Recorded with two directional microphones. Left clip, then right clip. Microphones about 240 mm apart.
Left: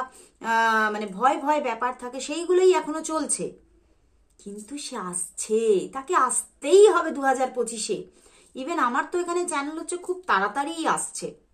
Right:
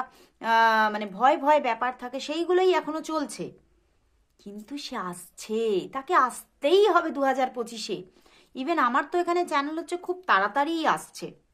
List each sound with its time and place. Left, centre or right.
0.4 s speech: right